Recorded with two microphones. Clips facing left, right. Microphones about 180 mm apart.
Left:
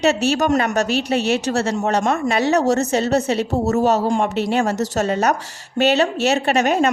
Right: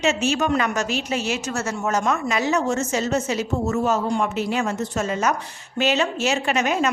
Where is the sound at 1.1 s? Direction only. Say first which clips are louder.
Left 7 dB; 65° left (ahead or behind).